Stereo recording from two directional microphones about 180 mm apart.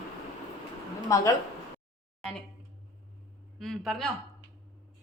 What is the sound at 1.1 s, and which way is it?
Speech, 15° left (ahead or behind).